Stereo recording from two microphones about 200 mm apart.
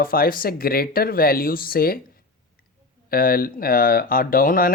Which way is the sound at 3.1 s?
45° left (ahead or behind).